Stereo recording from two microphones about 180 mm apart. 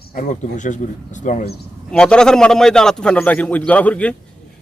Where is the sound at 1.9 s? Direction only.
5° left (ahead or behind).